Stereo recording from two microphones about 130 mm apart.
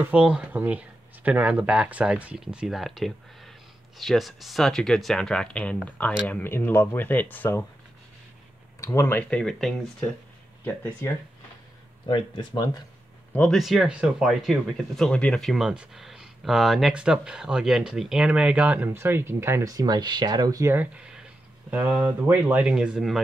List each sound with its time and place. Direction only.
0.0 s speech: 10° right (ahead or behind); by 7.6 s 15° left (ahead or behind)
8.8 s speech: 20° left (ahead or behind)
9.4 s speech: 5° left (ahead or behind)
10.6 s speech: 15° left (ahead or behind)
12.1 s speech: 35° left (ahead or behind)
13.3 s speech: 10° left (ahead or behind)
13.6 s speech: centre (ahead or behind); by 20.7 s 25° right (ahead or behind)
20.7 s speech: 10° right (ahead or behind)